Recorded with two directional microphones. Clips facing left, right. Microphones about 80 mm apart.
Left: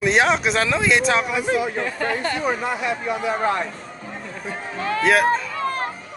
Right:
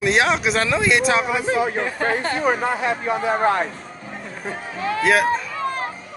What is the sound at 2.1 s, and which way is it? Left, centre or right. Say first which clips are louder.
Speech: right 3 dB; right.